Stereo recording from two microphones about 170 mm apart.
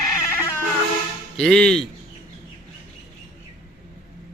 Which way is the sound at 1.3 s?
5° left (ahead or behind).